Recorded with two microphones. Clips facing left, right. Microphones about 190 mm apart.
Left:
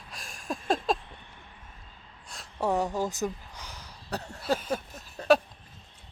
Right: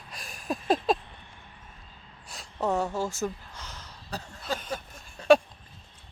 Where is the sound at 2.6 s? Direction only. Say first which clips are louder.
Even; 15° left (ahead or behind).